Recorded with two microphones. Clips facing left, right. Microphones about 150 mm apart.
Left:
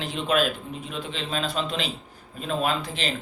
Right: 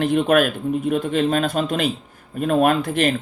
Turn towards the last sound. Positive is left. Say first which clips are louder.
# right 9 dB
turn(degrees=-55)  # may be behind; listen again after turning